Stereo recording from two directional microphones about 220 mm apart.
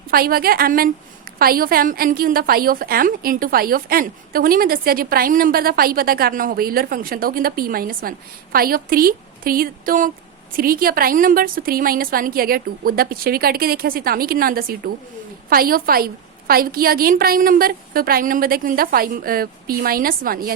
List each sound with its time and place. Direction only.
0.1 s a woman's voice: 40° right (ahead or behind)